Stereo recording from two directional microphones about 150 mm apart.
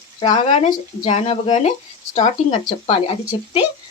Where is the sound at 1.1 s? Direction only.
45° left (ahead or behind).